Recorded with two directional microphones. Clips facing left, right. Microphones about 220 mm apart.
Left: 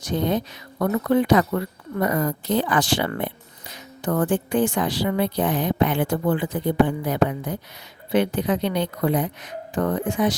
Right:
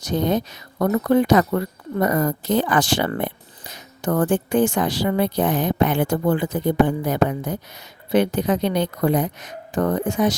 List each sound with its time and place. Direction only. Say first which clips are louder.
0.0 s speech: right 2 dB; 40° right (ahead or behind)